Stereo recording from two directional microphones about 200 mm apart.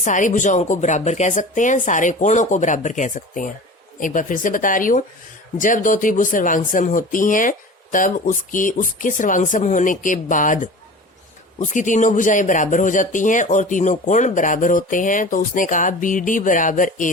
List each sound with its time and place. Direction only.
0.0 s speech: 40° left (ahead or behind)